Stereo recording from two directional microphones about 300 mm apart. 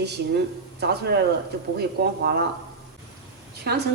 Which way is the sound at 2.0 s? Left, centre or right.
Right.